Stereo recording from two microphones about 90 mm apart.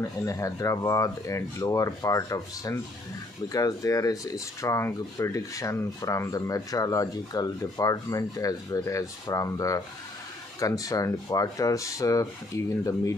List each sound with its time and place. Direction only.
0.2 s speech: 35° left (ahead or behind)